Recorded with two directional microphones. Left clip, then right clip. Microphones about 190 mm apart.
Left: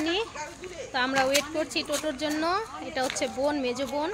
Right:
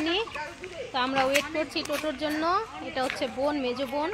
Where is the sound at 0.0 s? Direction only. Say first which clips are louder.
Even; 5° right (ahead or behind).